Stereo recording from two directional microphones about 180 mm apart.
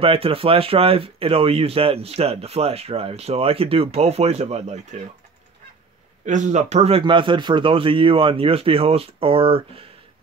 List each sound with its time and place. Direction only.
0.0 s speech: 30° right (ahead or behind)
6.2 s speech: 45° right (ahead or behind)